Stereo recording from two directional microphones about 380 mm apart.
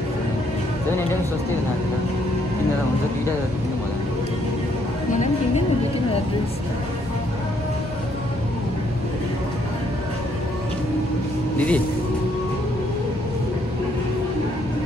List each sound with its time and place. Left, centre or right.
11.5 s speech: centre